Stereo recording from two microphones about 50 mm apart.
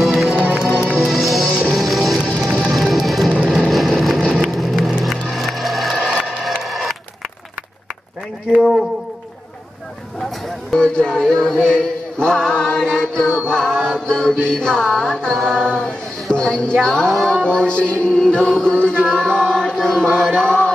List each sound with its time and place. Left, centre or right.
0.0 s music: centre
3.4 s vehicle: centre
4.2 s vehicle: centre
4.5 s vehicle: centre
5.3 s music: centre
6.6 s a sound: centre
8.5 s a sound: centre
10.7 s music: centre
17.4 s music: centre